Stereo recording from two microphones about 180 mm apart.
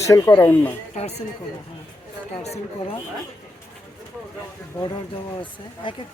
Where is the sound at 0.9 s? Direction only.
35° left (ahead or behind).